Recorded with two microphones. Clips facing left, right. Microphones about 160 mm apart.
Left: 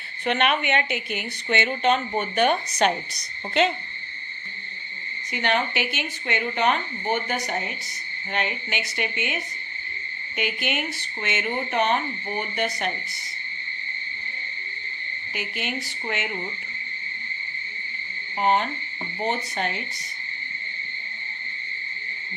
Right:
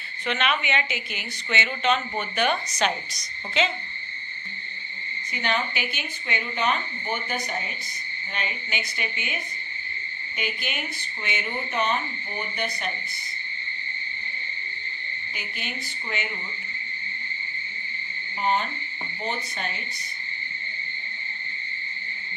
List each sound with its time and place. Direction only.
0.3 s a woman's voice: 55° left (ahead or behind)
5.3 s speech: 65° left (ahead or behind)
10.3 s speech: 70° left (ahead or behind)
15.3 s speech: 70° left (ahead or behind)
18.3 s speech: 60° left (ahead or behind)